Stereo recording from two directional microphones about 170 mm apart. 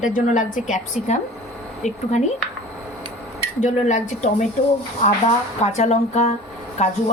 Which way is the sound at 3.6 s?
45° left (ahead or behind).